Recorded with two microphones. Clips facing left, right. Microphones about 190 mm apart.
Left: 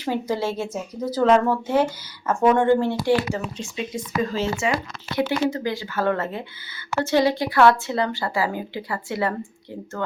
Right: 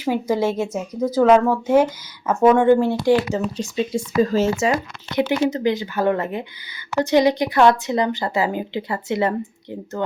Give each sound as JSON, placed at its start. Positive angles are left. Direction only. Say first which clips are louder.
{"t": 0.0, "sound": "speech", "louder": "right 4 dB", "side_deg": -10}
{"t": 3.4, "sound": "speech", "louder": "right 7 dB", "side_deg": -35}
{"t": 5.1, "sound": "a woman's voice", "louder": "right 3 dB", "side_deg": -20}